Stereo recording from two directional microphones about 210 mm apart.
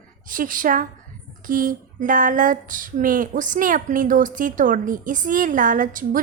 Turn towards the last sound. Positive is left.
turn(degrees=-40)  # may be behind; listen again after turning